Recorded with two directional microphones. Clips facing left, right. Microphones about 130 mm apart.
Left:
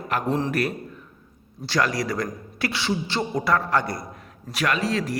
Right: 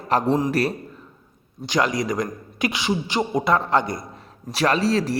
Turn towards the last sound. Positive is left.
turn(degrees=-35)  # may be behind; listen again after turning